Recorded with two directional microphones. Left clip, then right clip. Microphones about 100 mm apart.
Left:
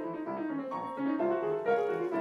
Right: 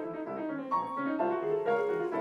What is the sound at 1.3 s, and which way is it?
Music, 15° left (ahead or behind).